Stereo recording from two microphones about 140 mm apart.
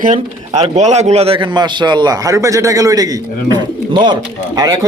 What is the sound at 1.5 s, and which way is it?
A man's voice, 30° right (ahead or behind).